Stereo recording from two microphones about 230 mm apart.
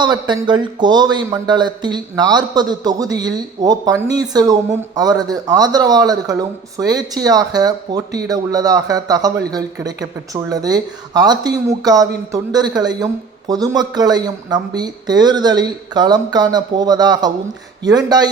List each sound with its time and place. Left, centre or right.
0.0 s speech: centre